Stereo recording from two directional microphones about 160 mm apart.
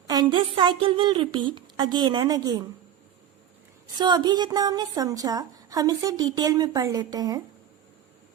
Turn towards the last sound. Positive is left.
turn(degrees=-25)  # may be behind; listen again after turning